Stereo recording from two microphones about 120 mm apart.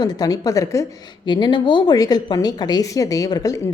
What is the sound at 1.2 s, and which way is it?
A woman's voice, 40° left (ahead or behind).